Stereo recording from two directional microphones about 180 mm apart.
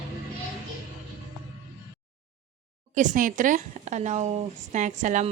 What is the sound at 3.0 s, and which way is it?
Speech, 45° right (ahead or behind).